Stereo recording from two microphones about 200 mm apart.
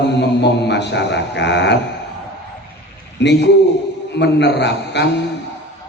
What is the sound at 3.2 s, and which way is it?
A man's voice, 60° left (ahead or behind).